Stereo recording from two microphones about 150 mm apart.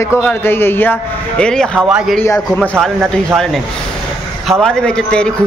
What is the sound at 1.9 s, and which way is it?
Music, 5° right (ahead or behind).